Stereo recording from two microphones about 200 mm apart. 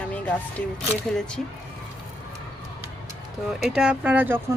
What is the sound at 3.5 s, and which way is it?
Speech, 5° right (ahead or behind).